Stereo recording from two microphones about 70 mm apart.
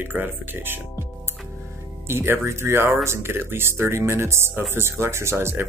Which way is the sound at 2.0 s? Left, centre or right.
Right.